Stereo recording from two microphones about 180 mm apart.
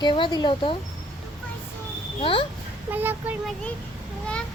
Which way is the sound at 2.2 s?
30° left (ahead or behind).